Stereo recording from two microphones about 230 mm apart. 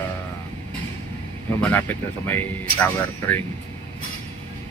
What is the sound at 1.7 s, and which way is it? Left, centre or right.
Speech, centre.